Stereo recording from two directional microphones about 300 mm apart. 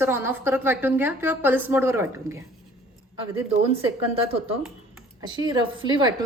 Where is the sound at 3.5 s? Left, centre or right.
Centre.